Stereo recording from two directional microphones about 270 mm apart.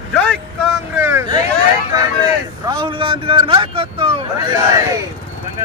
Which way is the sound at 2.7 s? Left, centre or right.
Centre.